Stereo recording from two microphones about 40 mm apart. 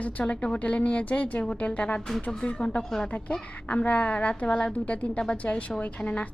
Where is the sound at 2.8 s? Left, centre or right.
Centre.